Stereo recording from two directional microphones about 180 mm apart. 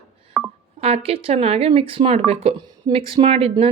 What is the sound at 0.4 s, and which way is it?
Music, 5° right (ahead or behind).